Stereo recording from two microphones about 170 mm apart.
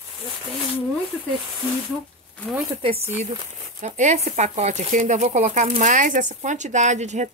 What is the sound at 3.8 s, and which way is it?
Speech, 45° right (ahead or behind).